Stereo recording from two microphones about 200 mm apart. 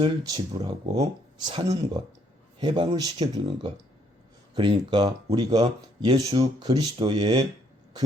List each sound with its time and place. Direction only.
0.0 s speech: 20° right (ahead or behind)